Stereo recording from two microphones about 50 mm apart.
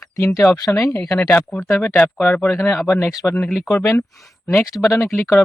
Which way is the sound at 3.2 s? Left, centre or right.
Left.